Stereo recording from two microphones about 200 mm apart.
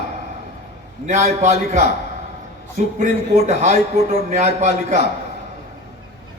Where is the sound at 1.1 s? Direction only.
35° right (ahead or behind).